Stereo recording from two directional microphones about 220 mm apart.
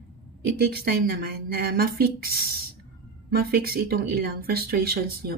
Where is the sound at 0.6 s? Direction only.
45° right (ahead or behind).